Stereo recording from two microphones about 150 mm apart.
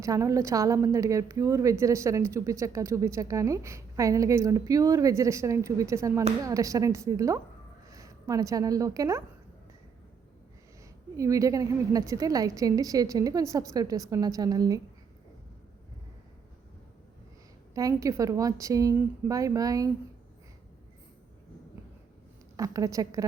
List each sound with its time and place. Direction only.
0.0 s a woman's voice: 20° right (ahead or behind)
11.2 s a woman's voice: 20° right (ahead or behind)
17.7 s a woman's voice: 20° right (ahead or behind)
22.5 s a woman's voice: 25° right (ahead or behind)